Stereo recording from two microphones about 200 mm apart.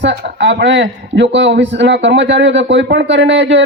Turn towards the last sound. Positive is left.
turn(degrees=-65)  # may be behind; listen again after turning